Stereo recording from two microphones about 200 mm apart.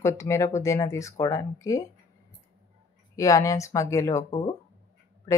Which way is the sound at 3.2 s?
15° left (ahead or behind).